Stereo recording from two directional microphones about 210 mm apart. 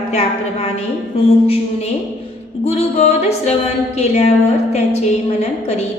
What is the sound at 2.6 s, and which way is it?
A woman's voice, 30° left (ahead or behind).